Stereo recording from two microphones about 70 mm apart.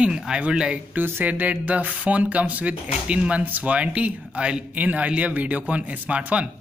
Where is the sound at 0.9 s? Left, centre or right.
Right.